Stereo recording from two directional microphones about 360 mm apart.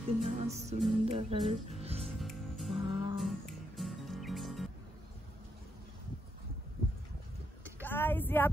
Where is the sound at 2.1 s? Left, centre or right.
Centre.